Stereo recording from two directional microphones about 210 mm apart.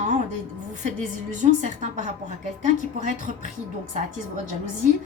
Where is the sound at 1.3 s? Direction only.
35° right (ahead or behind).